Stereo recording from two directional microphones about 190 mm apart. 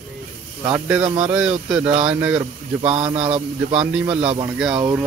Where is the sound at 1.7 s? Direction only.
5° right (ahead or behind).